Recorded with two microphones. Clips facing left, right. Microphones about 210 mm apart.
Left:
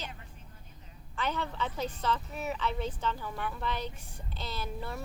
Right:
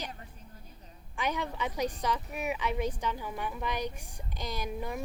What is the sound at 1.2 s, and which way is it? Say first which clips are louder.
A woman's voice: right 1 dB; 15° right (ahead or behind).